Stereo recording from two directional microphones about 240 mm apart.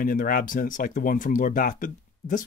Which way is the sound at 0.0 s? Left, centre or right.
Left.